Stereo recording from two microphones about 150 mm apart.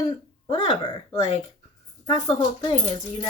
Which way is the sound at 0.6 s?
35° left (ahead or behind).